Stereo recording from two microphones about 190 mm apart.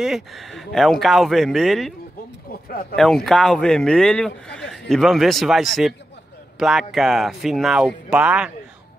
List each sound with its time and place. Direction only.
0.0 s a man's voice: centre (ahead or behind)
2.7 s speech: 50° left (ahead or behind)
3.3 s a man's voice: 5° left (ahead or behind)